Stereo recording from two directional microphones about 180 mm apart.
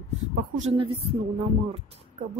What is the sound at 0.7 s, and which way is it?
Speech, 30° right (ahead or behind).